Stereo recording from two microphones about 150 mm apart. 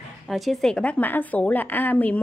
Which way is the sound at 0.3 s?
Centre (ahead or behind).